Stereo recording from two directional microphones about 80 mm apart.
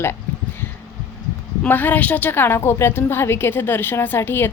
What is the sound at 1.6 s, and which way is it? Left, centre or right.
Speech, left.